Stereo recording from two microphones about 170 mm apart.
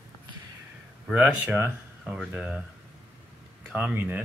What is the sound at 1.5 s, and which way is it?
Speech, 15° right (ahead or behind).